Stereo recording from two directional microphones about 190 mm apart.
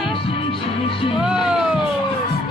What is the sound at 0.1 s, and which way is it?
Music, 30° left (ahead or behind).